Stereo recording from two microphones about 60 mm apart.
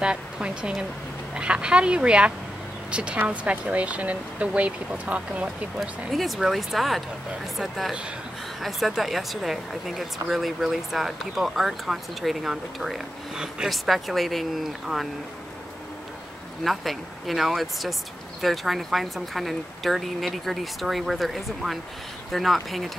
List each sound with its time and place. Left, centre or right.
0.0 s a woman's voice: centre
5.8 s speech: centre
16.6 s speech: centre